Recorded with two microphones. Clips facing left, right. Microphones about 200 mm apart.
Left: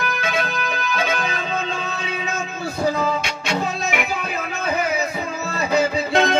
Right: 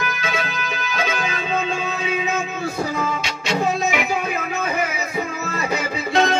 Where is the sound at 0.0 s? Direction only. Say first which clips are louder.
Left 2 dB; 55° left (ahead or behind).